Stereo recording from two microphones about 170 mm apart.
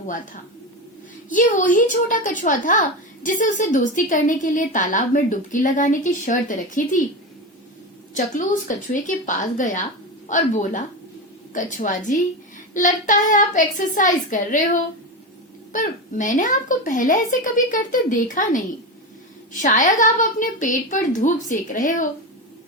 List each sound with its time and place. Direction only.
1.3 s a woman's voice: 50° left (ahead or behind)
8.1 s a woman's voice: 50° left (ahead or behind)
15.7 s a woman's voice: 50° left (ahead or behind)